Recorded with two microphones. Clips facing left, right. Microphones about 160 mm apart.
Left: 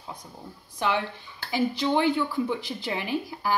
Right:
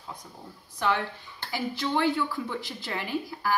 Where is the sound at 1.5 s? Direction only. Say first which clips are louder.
Left 5 dB; 15° left (ahead or behind).